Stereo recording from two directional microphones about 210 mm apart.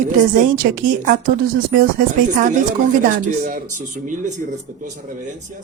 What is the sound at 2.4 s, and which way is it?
Speech, 35° right (ahead or behind).